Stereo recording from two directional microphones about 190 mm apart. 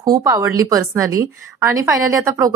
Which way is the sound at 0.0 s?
20° right (ahead or behind).